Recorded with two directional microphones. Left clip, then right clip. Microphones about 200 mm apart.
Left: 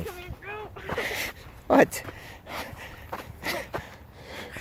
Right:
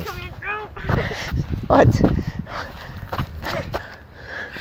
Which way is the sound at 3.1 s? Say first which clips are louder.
Right 6 dB; 50° right (ahead or behind).